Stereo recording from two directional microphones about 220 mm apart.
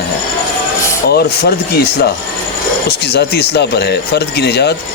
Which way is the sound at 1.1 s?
45° left (ahead or behind).